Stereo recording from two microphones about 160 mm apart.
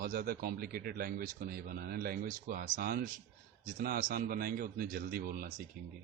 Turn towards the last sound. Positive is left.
turn(degrees=-65)  # may be behind; listen again after turning